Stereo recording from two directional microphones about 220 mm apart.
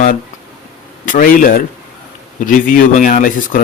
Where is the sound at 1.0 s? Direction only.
40° left (ahead or behind).